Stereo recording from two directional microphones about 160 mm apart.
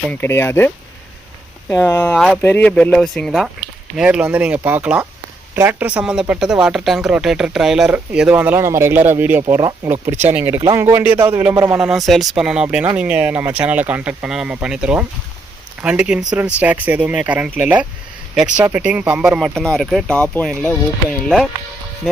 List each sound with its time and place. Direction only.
0.1 s speech: 15° left (ahead or behind)
1.7 s speech: 15° left (ahead or behind); by 9.4 s 10° right (ahead or behind)
9.6 s speech: 25° right (ahead or behind)
10.1 s speech: 45° right (ahead or behind)
10.6 s speech: 15° right (ahead or behind); by 21.4 s centre (ahead or behind)